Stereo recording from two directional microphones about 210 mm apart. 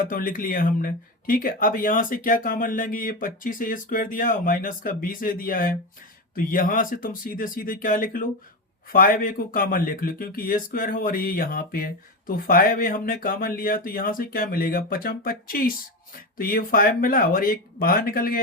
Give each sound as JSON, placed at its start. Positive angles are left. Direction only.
{"t": 0.0, "sound": "speech", "side_deg": 40}